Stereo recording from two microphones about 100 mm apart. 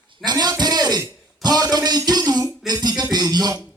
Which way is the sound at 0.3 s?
45° right (ahead or behind).